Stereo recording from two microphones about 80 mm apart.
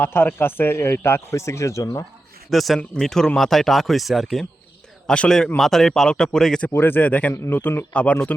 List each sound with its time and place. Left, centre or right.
0.0 s speech: left
2.5 s speech: centre
5.0 s speech: centre
6.7 s speech: left
7.4 s speech: left
7.9 s speech: centre